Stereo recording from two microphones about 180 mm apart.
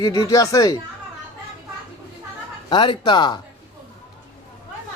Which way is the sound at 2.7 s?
25° left (ahead or behind).